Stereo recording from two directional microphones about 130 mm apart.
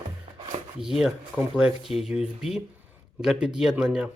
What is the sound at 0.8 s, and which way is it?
Speech, 5° right (ahead or behind).